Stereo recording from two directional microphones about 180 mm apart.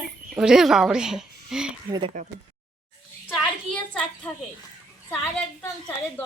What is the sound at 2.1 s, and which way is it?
Speech, 40° right (ahead or behind).